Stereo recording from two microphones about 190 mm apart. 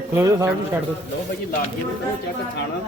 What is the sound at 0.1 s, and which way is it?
Speech, 15° right (ahead or behind).